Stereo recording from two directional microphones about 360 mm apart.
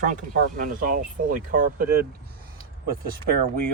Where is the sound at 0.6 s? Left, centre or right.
Right.